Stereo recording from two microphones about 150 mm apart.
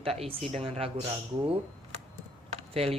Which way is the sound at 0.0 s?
40° right (ahead or behind).